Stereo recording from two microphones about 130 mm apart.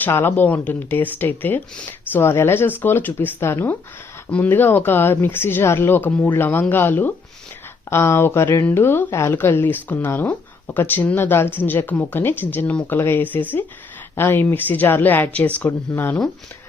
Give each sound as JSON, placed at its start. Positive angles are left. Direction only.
{"t": 0.0, "sound": "speech", "side_deg": 15}